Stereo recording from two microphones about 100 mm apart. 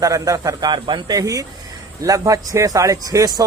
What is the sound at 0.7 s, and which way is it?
A man's voice, 50° right (ahead or behind).